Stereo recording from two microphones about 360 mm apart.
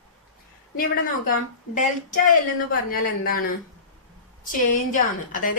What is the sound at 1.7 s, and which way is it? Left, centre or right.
A woman's voice, left.